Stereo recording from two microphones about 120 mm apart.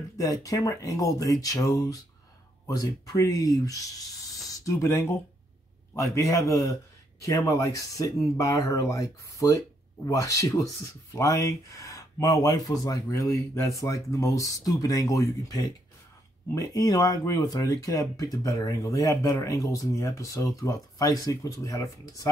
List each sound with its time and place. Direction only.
0.2 s speech: 30° left (ahead or behind)